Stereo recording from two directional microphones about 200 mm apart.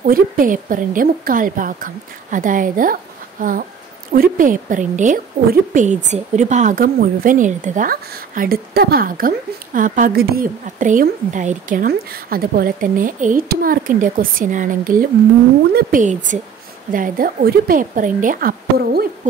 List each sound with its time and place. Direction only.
0.0 s a woman's voice: 45° right (ahead or behind)